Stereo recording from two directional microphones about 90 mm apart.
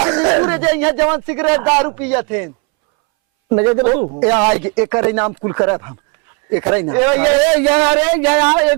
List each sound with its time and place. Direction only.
0.0 s a man's voice: 15° right (ahead or behind)
4.2 s a man's voice: 20° right (ahead or behind)